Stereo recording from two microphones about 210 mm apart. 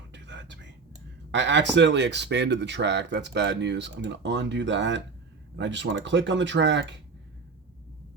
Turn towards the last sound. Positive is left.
turn(degrees=-60)  # may be behind; listen again after turning